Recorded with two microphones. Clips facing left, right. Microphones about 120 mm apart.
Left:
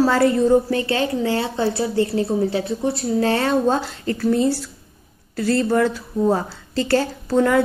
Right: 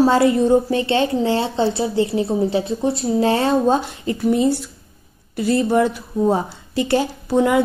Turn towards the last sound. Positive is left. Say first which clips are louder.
# right 1 dB
turn(degrees=-15)  # may be behind; listen again after turning